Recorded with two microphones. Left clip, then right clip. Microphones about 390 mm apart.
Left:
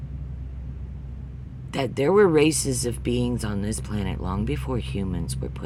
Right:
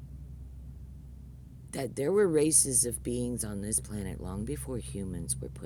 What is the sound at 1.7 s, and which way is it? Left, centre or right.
Speech, right.